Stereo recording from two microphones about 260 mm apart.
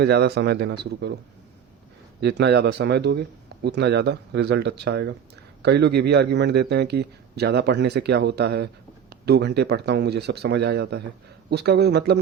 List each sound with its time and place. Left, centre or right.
0.0 s a man's voice: right
2.2 s a man's voice: right